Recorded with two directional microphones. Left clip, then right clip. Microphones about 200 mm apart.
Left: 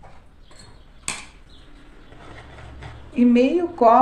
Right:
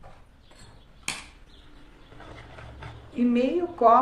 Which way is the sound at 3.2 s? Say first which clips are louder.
Left 7 dB; 25° left (ahead or behind).